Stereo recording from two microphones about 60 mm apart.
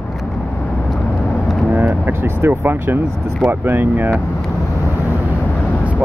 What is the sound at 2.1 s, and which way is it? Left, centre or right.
Speech, right.